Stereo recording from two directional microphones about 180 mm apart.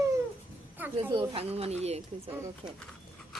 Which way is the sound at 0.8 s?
10° right (ahead or behind).